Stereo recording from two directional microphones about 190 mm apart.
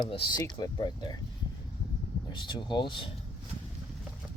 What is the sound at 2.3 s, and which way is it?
Speech, 25° left (ahead or behind).